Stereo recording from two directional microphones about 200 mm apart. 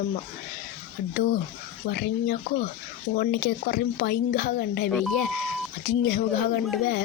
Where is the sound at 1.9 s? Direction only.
50° left (ahead or behind).